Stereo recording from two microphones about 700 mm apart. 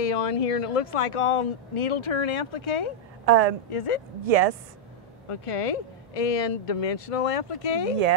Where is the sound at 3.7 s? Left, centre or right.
Left.